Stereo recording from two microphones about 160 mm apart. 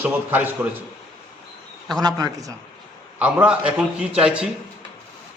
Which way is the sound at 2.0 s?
20° right (ahead or behind).